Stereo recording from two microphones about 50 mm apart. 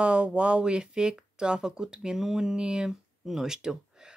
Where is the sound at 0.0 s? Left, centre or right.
Right.